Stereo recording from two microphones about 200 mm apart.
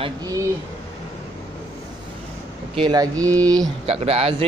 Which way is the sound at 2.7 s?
20° right (ahead or behind).